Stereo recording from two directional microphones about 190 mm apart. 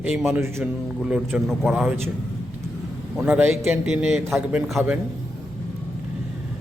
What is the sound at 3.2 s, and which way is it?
A man's voice, 10° right (ahead or behind).